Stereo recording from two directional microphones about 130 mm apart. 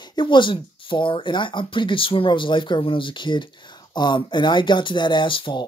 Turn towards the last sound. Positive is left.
turn(degrees=40)  # may be behind; listen again after turning